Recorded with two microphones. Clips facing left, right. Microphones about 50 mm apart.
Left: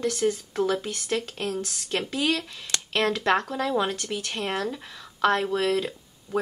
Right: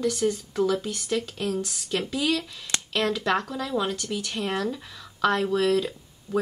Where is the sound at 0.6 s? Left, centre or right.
Centre.